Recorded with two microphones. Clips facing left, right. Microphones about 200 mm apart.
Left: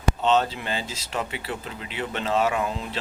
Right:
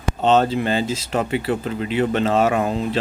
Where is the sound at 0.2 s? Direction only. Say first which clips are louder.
Right 8 dB; 50° right (ahead or behind).